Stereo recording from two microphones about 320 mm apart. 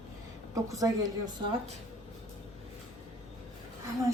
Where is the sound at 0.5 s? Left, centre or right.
Centre.